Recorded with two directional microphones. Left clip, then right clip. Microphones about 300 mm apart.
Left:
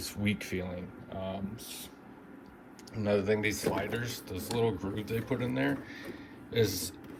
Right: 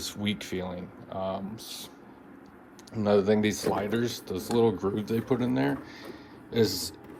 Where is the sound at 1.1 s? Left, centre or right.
Centre.